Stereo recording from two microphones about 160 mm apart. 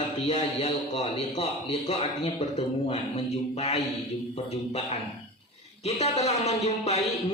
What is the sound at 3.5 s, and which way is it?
A man's voice, 40° left (ahead or behind).